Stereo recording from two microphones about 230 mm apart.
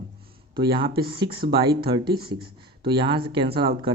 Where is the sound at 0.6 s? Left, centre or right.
Right.